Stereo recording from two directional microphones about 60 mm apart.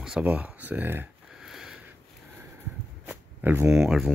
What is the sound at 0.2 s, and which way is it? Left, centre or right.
Speech, right.